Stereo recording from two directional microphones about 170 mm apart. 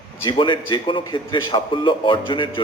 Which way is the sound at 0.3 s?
30° left (ahead or behind).